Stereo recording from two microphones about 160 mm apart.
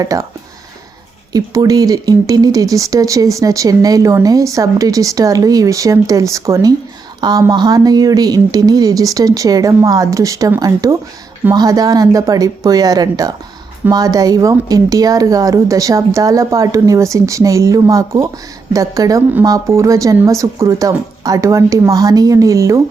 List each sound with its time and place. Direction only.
0.0 s speech: 20° right (ahead or behind)
1.3 s speech: 20° right (ahead or behind)